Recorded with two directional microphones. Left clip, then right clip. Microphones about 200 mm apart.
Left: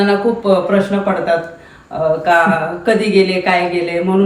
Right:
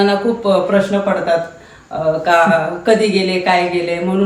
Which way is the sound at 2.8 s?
5° right (ahead or behind).